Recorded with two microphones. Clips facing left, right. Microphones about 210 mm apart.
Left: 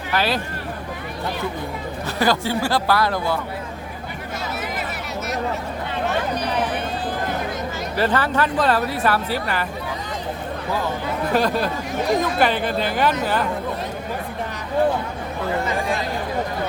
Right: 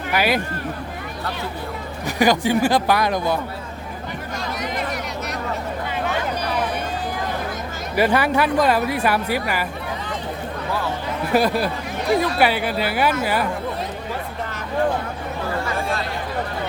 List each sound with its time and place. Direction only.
0.1 s speech: 15° right (ahead or behind)
2.0 s speech: 15° right (ahead or behind)
7.9 s speech: 10° right (ahead or behind)
11.3 s speech: 10° right (ahead or behind)
15.6 s a sound: 15° left (ahead or behind)